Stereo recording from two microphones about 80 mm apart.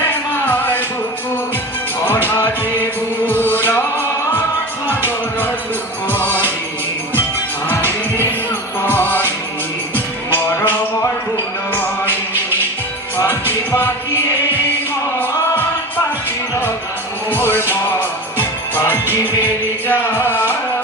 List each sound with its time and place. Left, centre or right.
0.1 s music: left
2.2 s music: left
6.1 s music: left
7.7 s music: left
9.0 s music: left
10.3 s music: left
12.0 s music: right
13.1 s music: left
17.3 s music: left
19.9 s music: left